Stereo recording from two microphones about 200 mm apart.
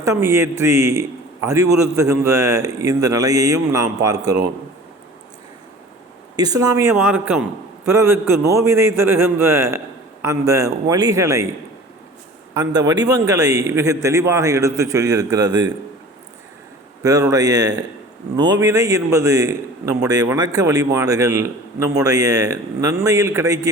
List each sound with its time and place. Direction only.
0.0 s a man's voice: 15° right (ahead or behind)
6.3 s a man's voice: 20° right (ahead or behind)
7.0 s a man's voice: centre (ahead or behind)
7.9 s a man's voice: 10° right (ahead or behind)
12.7 s a man's voice: 20° right (ahead or behind)
17.0 s a man's voice: 20° right (ahead or behind)